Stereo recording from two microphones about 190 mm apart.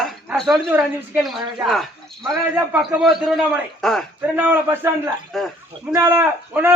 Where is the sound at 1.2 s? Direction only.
Centre (ahead or behind).